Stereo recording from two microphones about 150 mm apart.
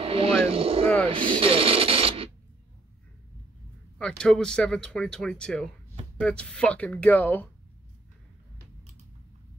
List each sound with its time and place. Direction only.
0.0 s vehicle: 40° right (ahead or behind)
1.0 s speech: 35° right (ahead or behind)
4.0 s speech: 5° left (ahead or behind)